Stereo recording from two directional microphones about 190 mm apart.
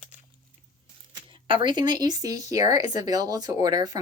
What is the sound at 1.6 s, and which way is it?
Speech, 25° right (ahead or behind).